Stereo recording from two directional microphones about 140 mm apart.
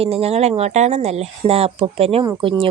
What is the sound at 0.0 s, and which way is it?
Speech, 45° right (ahead or behind).